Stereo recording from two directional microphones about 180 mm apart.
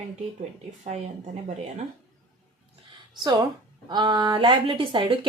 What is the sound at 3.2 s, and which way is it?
A woman's voice, 20° right (ahead or behind).